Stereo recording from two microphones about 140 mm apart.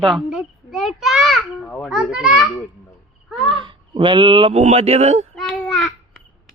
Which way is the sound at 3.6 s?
35° right (ahead or behind).